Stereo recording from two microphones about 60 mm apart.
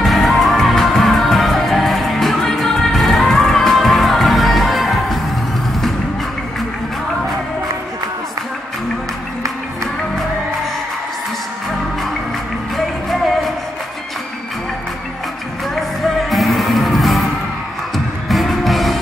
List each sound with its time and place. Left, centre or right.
0.0 s music: centre
16.3 s music: centre